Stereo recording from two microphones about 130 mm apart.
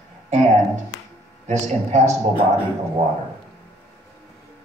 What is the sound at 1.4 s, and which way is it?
Speech, 60° right (ahead or behind).